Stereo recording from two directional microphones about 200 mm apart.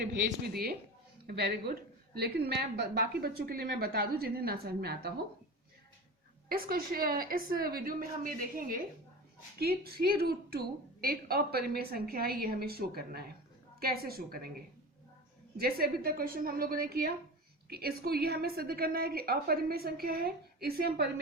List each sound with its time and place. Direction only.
0.3 s a woman's voice: 50° right (ahead or behind)
6.5 s a woman's voice: 50° right (ahead or behind)
15.5 s a woman's voice: 50° right (ahead or behind)